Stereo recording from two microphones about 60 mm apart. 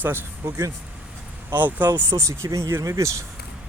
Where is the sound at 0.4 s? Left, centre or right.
Right.